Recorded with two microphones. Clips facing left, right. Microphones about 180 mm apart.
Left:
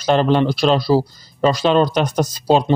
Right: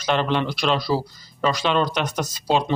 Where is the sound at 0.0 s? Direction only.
35° left (ahead or behind).